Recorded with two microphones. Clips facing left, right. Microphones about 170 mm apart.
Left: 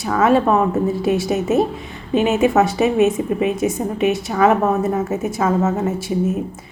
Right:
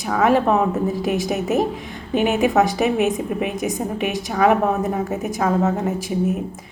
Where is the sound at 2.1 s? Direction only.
65° right (ahead or behind).